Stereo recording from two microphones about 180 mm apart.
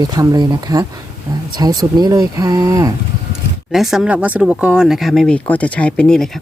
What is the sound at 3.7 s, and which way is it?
Speech, centre (ahead or behind).